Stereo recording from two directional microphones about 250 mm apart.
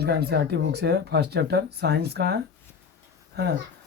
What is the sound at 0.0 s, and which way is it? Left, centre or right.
Speech, right.